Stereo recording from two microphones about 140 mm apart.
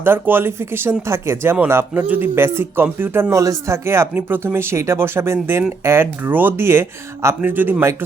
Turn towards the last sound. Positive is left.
turn(degrees=-15)  # may be behind; listen again after turning